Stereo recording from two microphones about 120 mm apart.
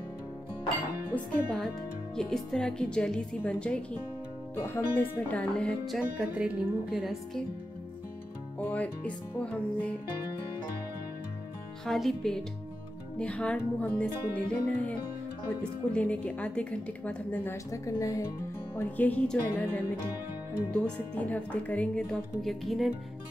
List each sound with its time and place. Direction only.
1.1 s a woman's voice: 5° left (ahead or behind)
4.6 s a woman's voice: 20° left (ahead or behind)
5.9 s speech: 10° right (ahead or behind)
8.5 s a woman's voice: 15° left (ahead or behind)
11.8 s a woman's voice: 5° left (ahead or behind)
17.6 s a woman's voice: 25° left (ahead or behind); by 22.9 s centre (ahead or behind)